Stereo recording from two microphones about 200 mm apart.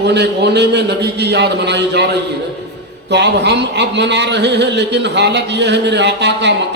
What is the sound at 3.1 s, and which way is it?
Speech, 60° right (ahead or behind).